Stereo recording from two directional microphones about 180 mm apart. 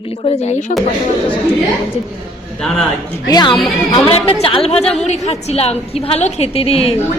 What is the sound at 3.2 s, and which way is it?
A woman's voice, 20° left (ahead or behind).